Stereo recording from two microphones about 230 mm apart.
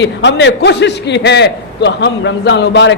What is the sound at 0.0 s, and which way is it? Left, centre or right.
A man's voice, left.